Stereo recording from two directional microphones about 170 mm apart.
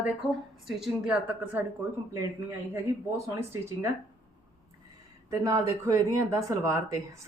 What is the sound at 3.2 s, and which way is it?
Speech, 15° right (ahead or behind).